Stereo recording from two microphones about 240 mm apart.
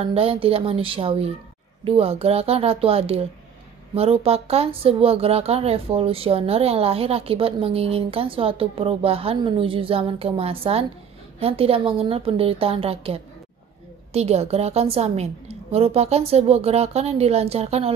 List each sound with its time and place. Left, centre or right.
0.0 s speech: right